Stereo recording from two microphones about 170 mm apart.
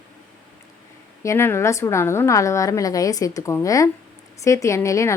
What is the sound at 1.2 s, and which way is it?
A woman's voice, 15° left (ahead or behind).